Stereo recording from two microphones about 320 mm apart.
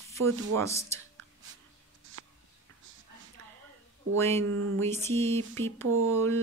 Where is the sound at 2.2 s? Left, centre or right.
Right.